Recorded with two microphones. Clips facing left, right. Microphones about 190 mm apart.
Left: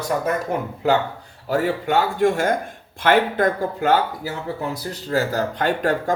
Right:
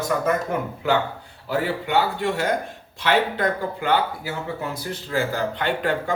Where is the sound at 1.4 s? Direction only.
45° left (ahead or behind).